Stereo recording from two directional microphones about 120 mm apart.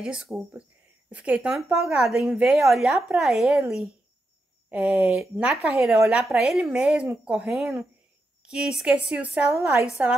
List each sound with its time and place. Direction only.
0.0 s a woman's voice: 5° right (ahead or behind)
9.6 s a woman's voice: 25° right (ahead or behind)